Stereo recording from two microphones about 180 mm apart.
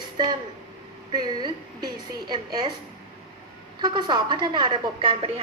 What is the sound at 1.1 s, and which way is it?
A woman's voice, 25° right (ahead or behind).